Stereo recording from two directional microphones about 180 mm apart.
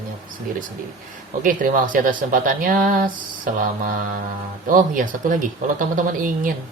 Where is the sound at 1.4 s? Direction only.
50° right (ahead or behind).